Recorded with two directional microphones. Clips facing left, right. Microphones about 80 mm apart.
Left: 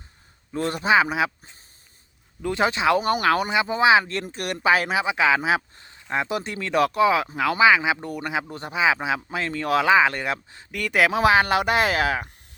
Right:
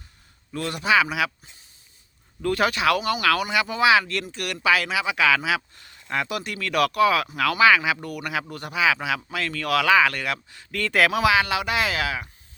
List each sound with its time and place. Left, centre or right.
0.5 s speech: left
2.4 s speech: left
3.0 s speech: left
10.7 s speech: centre
11.2 s speech: left